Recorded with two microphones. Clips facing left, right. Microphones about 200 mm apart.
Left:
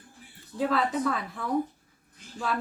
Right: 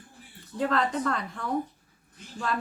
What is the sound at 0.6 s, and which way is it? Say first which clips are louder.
Speech: even; 5° left (ahead or behind).